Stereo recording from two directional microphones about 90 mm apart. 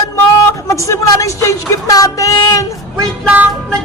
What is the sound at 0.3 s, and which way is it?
Speech, 35° left (ahead or behind).